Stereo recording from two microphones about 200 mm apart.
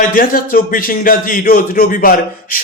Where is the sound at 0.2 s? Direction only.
45° left (ahead or behind).